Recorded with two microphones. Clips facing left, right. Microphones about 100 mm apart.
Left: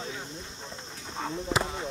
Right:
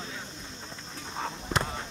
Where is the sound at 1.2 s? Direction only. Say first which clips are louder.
Left 2 dB; centre (ahead or behind).